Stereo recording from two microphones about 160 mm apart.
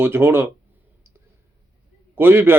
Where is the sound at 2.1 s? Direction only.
15° right (ahead or behind).